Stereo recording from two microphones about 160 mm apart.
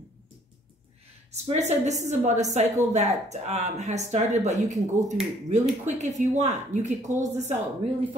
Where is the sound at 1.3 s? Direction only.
45° right (ahead or behind).